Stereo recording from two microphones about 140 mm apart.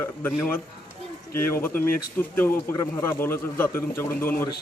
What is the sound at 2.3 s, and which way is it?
A man's voice, 15° left (ahead or behind).